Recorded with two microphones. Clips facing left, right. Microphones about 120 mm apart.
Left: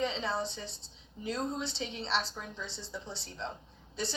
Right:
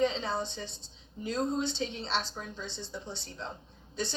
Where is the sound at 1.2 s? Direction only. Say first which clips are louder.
Right 4 dB; 40° right (ahead or behind).